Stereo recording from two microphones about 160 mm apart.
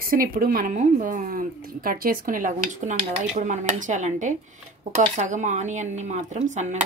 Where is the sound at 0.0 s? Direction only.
65° right (ahead or behind).